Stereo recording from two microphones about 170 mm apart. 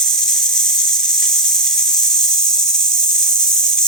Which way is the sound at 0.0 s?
5° left (ahead or behind).